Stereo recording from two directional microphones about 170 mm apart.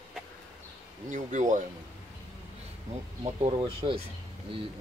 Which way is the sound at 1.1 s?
45° right (ahead or behind).